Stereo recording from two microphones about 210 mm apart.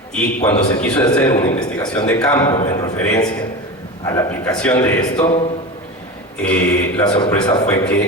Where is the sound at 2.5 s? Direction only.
35° left (ahead or behind).